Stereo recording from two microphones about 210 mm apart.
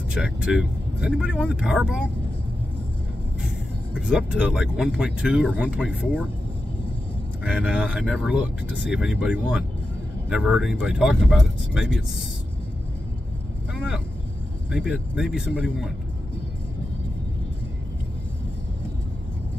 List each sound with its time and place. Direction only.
0.1 s speech: 5° right (ahead or behind)
3.4 s speech: 5° right (ahead or behind)
7.4 s speech: 5° right (ahead or behind)
13.7 s speech: centre (ahead or behind)